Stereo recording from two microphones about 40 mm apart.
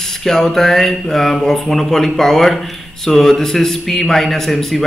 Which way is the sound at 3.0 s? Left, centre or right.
Centre.